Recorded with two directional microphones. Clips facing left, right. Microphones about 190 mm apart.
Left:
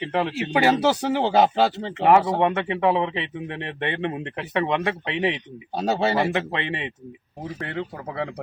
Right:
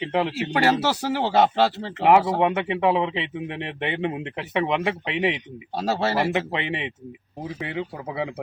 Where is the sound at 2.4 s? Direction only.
15° right (ahead or behind).